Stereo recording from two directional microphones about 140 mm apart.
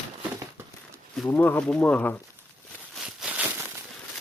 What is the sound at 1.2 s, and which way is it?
Speech, 15° left (ahead or behind).